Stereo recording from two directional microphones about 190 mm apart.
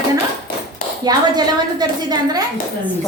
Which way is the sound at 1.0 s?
20° right (ahead or behind).